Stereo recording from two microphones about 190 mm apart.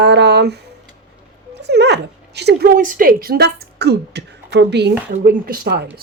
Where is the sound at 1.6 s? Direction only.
60° right (ahead or behind).